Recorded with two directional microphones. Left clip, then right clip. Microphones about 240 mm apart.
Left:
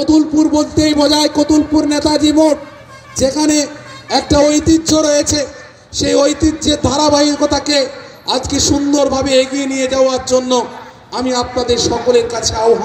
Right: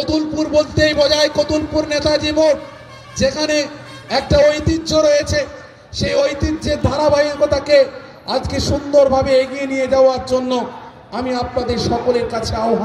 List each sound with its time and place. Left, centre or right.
0.0 s a man's voice: left